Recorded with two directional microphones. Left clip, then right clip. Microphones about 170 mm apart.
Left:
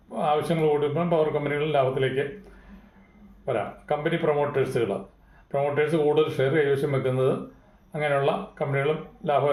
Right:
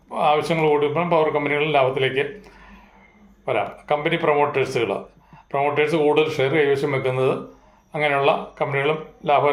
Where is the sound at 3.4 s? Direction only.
5° left (ahead or behind).